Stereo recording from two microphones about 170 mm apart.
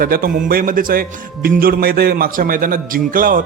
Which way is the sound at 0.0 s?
60° right (ahead or behind).